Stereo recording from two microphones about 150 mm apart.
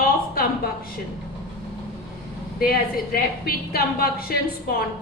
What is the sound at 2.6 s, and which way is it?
A woman's voice, 75° left (ahead or behind).